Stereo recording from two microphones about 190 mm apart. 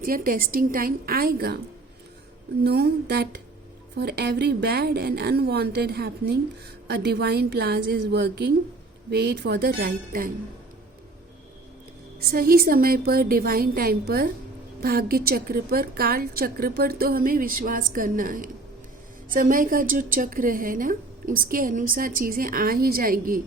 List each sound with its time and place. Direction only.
0.0 s a woman's voice: 50° right (ahead or behind)
2.6 s a woman's voice: 55° right (ahead or behind)
12.3 s a woman's voice: 50° right (ahead or behind)